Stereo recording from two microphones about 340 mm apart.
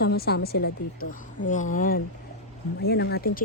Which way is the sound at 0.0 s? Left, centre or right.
Left.